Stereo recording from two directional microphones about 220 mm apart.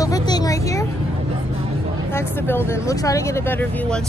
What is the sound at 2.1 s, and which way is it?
Speech, 10° left (ahead or behind).